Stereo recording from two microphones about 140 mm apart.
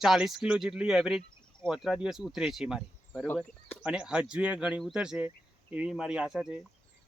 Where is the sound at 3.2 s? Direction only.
15° left (ahead or behind).